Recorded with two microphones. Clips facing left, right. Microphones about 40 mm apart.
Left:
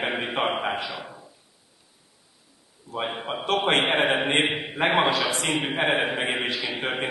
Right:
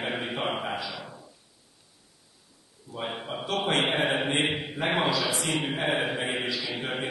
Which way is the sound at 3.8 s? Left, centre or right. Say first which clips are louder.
Left 4 dB; left.